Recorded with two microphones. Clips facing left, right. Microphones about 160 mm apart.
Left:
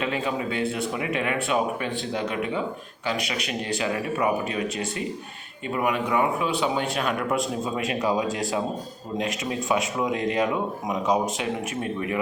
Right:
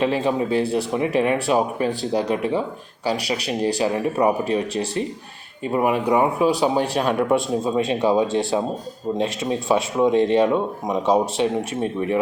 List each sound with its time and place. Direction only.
0.0 s speech: 35° right (ahead or behind)